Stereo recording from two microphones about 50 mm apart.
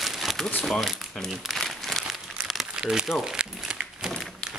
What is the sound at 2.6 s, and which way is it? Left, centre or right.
Crumpling, centre.